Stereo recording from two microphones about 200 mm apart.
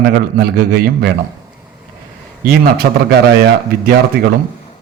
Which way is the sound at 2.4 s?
50° right (ahead or behind).